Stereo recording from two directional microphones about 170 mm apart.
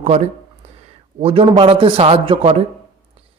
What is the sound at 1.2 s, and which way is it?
A man's voice, 35° right (ahead or behind).